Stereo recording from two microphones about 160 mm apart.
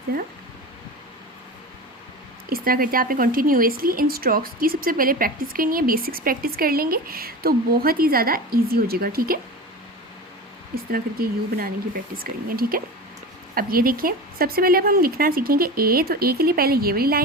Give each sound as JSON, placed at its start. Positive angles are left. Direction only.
{"t": 2.5, "sound": "speech", "side_deg": -65}
{"t": 10.9, "sound": "a woman's voice", "side_deg": -70}